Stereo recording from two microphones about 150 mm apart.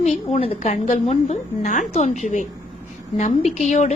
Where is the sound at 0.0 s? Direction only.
50° left (ahead or behind).